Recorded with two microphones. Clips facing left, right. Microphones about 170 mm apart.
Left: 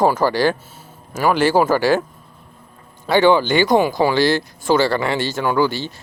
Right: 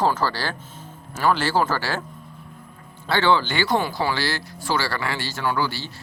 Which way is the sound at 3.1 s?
15° left (ahead or behind).